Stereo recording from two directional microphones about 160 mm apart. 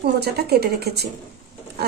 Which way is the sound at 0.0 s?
85° right.